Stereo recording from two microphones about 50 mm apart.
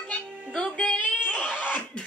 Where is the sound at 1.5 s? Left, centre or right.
Left.